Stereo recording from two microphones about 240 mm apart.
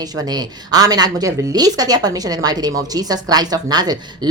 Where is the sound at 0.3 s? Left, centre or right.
Centre.